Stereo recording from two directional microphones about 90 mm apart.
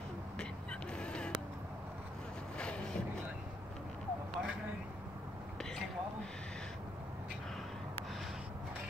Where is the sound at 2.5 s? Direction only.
10° left (ahead or behind).